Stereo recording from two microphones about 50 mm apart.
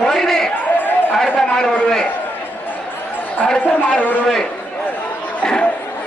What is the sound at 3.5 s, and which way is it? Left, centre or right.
Speech, left.